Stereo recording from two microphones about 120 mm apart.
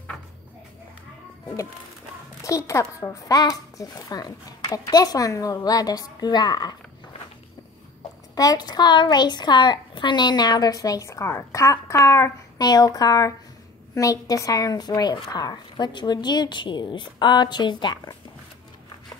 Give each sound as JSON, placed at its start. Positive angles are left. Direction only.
{"t": 2.4, "sound": "a woman's voice", "side_deg": 25}
{"t": 8.4, "sound": "a woman's voice", "side_deg": 35}